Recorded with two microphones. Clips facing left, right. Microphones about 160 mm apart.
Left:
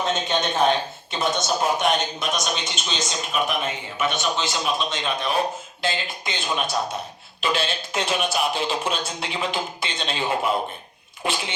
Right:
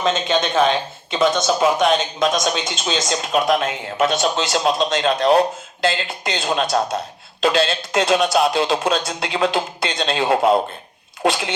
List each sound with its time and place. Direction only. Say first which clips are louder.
0.0 s speech: right 4 dB; 90° right